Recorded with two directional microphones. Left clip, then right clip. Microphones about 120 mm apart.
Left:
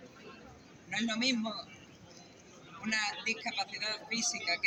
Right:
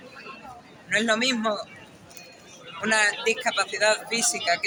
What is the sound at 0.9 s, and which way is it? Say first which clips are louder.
Speech: right 10 dB; 55° right (ahead or behind).